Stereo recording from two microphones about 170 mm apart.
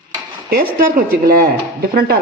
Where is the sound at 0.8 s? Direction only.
55° right (ahead or behind).